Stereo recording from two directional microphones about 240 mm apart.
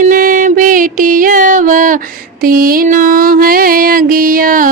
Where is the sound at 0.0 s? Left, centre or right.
Right.